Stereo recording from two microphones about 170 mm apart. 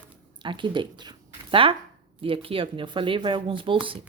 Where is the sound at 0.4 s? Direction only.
30° right (ahead or behind).